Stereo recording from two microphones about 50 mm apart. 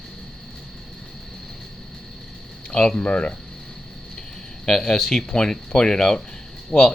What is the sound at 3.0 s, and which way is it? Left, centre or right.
Speech, left.